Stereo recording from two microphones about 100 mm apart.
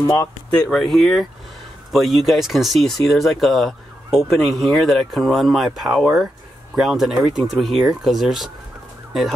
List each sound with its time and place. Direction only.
0.0 s speech: 25° left (ahead or behind)
0.5 s speech: 10° left (ahead or behind)